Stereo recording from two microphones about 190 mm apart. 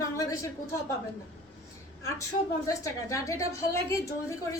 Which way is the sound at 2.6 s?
15° left (ahead or behind).